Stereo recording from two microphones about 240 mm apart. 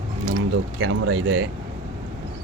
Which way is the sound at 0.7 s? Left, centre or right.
Right.